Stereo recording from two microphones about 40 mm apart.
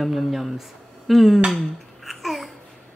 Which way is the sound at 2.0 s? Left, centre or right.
Centre.